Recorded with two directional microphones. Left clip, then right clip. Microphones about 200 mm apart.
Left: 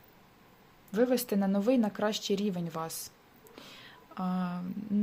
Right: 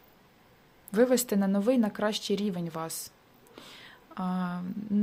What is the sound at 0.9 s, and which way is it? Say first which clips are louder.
Speech: right 4 dB; 20° right (ahead or behind).